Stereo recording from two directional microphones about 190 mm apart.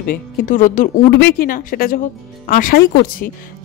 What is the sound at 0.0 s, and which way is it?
Speech, 50° left (ahead or behind).